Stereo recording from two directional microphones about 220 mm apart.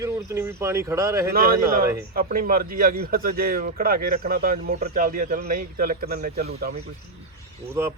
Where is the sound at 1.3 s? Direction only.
45° right (ahead or behind).